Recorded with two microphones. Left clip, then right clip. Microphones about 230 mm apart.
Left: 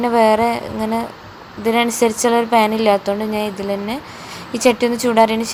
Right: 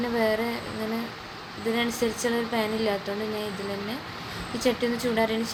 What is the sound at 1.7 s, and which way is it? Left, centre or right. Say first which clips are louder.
Speech: left 11 dB; left.